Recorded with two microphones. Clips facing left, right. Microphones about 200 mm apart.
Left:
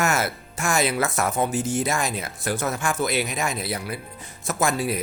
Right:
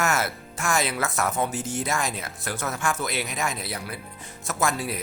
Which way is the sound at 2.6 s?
20° left (ahead or behind).